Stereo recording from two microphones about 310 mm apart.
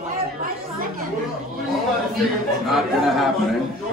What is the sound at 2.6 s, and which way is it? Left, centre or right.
Speech, centre.